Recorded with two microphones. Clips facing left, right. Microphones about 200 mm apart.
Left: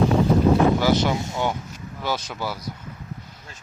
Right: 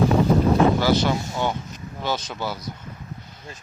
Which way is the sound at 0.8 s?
15° left (ahead or behind).